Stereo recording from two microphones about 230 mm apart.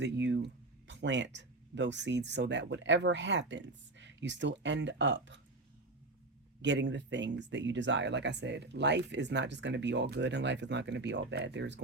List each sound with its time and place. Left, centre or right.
0.0 s speech: right
6.6 s speech: right